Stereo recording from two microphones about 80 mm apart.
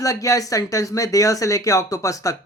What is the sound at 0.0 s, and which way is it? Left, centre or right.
Speech, left.